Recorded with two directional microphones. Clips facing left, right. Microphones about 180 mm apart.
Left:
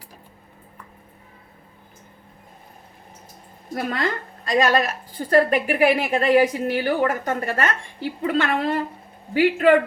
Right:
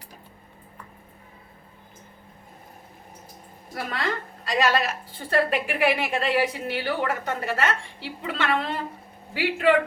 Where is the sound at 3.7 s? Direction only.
45° left (ahead or behind).